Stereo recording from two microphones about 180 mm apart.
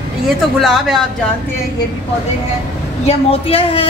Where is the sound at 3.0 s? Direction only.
30° left (ahead or behind).